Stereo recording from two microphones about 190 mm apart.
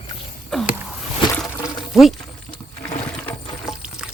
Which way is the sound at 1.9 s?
Centre (ahead or behind).